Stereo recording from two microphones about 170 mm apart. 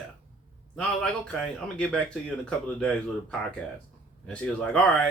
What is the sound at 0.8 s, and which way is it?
Speech, 5° left (ahead or behind).